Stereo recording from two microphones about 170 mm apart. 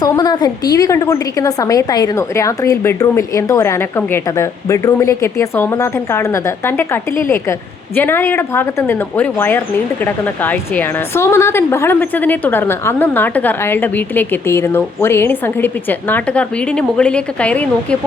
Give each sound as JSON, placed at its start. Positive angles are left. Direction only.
{"t": 0.0, "sound": "speech", "side_deg": 25}